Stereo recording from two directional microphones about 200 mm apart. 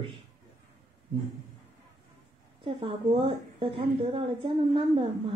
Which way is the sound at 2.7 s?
25° right (ahead or behind).